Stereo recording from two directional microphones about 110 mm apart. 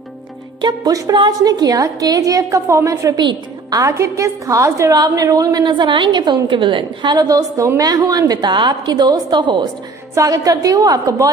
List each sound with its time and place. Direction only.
0.6 s a woman's voice: 40° right (ahead or behind)